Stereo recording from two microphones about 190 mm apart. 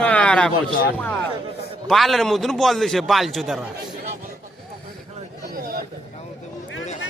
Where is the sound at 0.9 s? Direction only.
10° left (ahead or behind).